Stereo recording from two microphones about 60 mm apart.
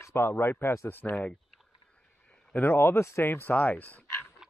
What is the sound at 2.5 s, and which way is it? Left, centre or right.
Speech, left.